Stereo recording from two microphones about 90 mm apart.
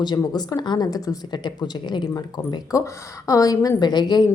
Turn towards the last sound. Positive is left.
turn(degrees=55)  # may be behind; listen again after turning